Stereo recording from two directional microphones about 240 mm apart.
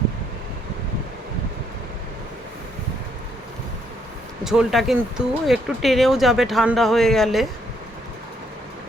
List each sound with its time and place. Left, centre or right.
4.4 s speech: centre